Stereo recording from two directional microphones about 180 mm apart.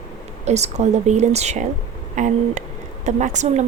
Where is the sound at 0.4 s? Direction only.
40° right (ahead or behind).